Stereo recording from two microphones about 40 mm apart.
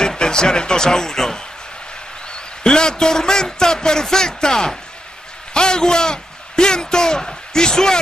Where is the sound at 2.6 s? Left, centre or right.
Centre.